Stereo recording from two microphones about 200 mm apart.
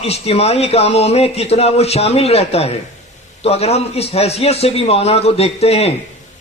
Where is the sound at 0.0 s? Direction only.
30° left (ahead or behind).